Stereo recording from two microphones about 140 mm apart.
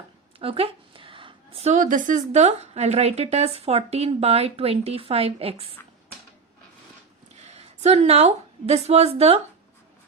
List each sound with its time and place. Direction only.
0.3 s a sound: 45° right (ahead or behind)
1.7 s a woman's voice: 70° right (ahead or behind); by 5.6 s 45° right (ahead or behind)
7.3 s a woman's voice: 55° right (ahead or behind)